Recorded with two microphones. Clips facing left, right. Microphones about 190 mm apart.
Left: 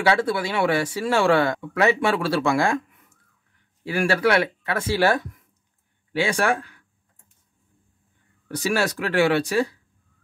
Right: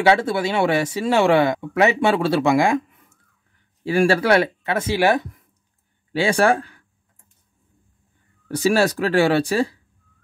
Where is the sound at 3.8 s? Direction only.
30° right (ahead or behind).